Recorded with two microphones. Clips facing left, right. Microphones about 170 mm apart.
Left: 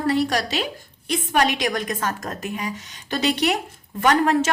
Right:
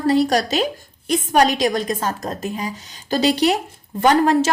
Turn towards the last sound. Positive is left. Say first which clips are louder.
# right 3 dB
turn(degrees=-35)  # may be behind; listen again after turning